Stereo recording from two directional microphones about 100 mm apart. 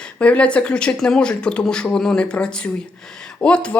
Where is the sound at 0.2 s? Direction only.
10° left (ahead or behind).